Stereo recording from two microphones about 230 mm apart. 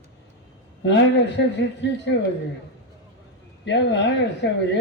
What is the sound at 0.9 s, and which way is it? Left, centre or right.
Speech, left.